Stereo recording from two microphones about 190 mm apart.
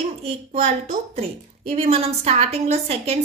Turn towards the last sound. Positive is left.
turn(degrees=-30)  # may be behind; listen again after turning